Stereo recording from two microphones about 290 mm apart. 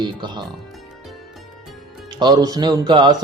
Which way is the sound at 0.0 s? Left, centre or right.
Centre.